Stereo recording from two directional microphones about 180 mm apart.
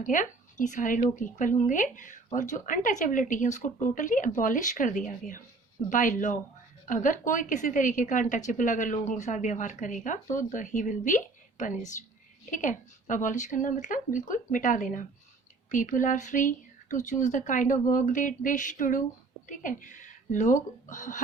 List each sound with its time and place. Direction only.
0.0 s speech: 45° left (ahead or behind)